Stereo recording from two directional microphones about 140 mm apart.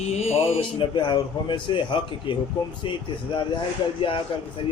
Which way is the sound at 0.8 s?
35° left (ahead or behind).